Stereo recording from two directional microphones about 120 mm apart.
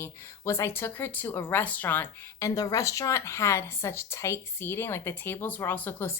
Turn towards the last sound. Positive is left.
turn(degrees=20)  # may be behind; listen again after turning